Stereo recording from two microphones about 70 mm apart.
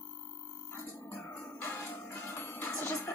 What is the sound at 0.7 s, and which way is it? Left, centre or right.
Music, left.